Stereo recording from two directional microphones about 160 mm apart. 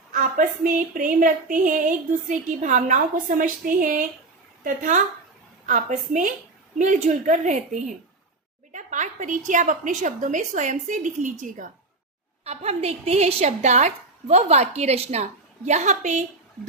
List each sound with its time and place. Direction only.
0.1 s a woman's voice: 60° right (ahead or behind)
12.5 s a woman's voice: 40° right (ahead or behind)